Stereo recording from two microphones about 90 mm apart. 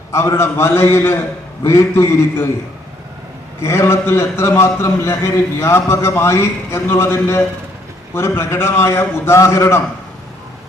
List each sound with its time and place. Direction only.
0.1 s a man's voice: 30° left (ahead or behind)
3.6 s a man's voice: 30° left (ahead or behind)